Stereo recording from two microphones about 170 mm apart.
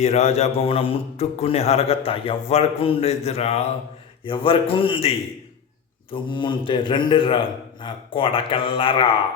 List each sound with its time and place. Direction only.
0.0 s a man's voice: 40° left (ahead or behind)